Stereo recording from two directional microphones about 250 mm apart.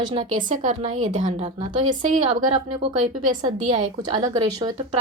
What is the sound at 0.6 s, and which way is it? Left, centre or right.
A woman's voice, right.